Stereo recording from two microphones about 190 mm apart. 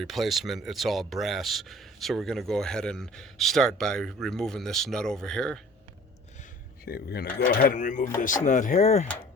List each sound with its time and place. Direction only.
0.0 s speech: centre (ahead or behind)
6.8 s speech: 55° left (ahead or behind); by 9.0 s 35° left (ahead or behind)